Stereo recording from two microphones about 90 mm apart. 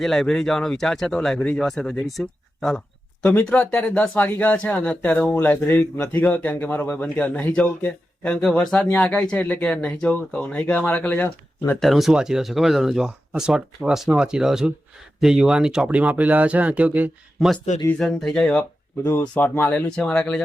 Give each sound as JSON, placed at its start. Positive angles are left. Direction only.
{"t": 0.0, "sound": "a man's voice", "side_deg": 5}
{"t": 11.8, "sound": "speech", "side_deg": 0}
{"t": 17.4, "sound": "speech", "side_deg": 0}
{"t": 19.3, "sound": "a man's voice", "side_deg": 20}